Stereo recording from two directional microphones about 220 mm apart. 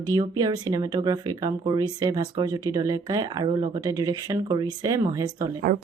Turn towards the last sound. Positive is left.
turn(degrees=-15)  # may be behind; listen again after turning